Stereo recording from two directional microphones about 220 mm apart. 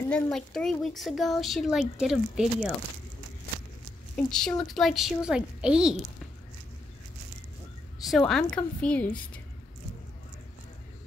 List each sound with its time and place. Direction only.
0.1 s a woman's voice: 5° left (ahead or behind)
4.3 s a woman's voice: 5° left (ahead or behind)
8.0 s a woman's voice: centre (ahead or behind)